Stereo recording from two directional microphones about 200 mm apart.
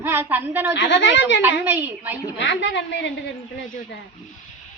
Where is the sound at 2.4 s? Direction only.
65° left (ahead or behind).